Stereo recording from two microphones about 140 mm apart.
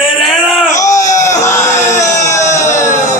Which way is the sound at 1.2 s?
20° left (ahead or behind).